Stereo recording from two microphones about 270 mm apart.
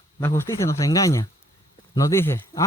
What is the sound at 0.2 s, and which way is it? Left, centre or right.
Speech, centre.